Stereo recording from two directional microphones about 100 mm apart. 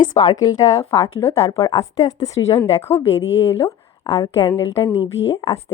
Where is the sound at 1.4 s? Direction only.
80° left.